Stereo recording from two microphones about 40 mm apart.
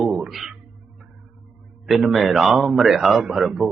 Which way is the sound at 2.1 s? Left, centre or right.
Centre.